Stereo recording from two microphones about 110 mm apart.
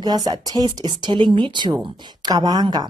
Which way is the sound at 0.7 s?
45° right (ahead or behind).